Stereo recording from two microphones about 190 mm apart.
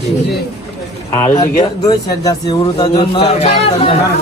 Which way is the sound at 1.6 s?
20° left (ahead or behind).